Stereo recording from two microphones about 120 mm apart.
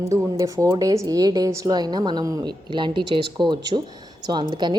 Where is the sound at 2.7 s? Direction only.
40° right (ahead or behind).